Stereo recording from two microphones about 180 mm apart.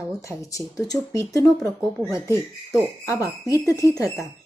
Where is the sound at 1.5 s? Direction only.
Centre (ahead or behind).